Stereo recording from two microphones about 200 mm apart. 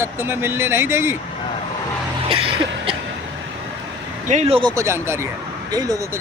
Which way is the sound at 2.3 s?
25° right (ahead or behind).